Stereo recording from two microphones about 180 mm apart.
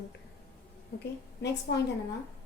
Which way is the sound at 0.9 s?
70° left (ahead or behind).